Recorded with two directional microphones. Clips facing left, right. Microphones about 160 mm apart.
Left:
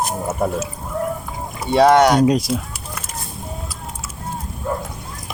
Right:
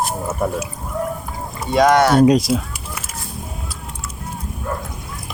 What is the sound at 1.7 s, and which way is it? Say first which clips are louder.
Speech: left 1 dB; 30° left (ahead or behind).